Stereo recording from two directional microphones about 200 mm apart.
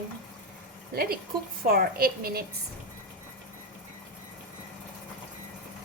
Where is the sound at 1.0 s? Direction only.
50° right (ahead or behind).